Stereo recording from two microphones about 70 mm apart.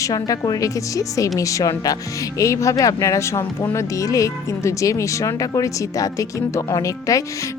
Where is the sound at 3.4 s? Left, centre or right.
Left.